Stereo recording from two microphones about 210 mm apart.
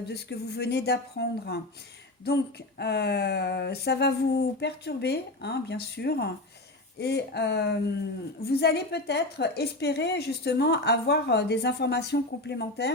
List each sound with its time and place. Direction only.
0.1 s a woman's voice: 50° left (ahead or behind)